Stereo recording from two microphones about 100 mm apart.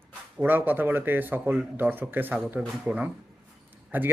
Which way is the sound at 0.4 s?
20° right (ahead or behind).